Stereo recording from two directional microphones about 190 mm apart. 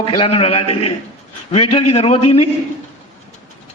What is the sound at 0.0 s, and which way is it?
A man's voice, 30° left (ahead or behind).